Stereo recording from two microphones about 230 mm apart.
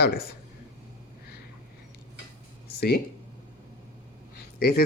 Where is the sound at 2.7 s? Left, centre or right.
Left.